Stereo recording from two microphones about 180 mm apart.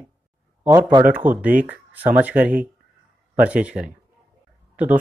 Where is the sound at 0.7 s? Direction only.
20° right (ahead or behind).